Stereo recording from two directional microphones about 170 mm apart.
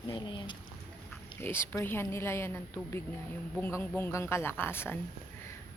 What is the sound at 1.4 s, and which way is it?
Speech, 15° left (ahead or behind).